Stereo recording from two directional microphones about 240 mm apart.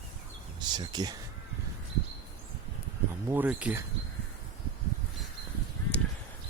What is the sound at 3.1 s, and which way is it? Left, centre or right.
Speech, centre.